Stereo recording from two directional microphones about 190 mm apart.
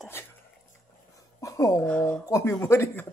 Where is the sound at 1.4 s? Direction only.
15° left (ahead or behind).